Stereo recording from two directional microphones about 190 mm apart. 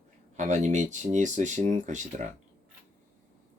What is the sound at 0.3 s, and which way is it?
Speech, 40° right (ahead or behind).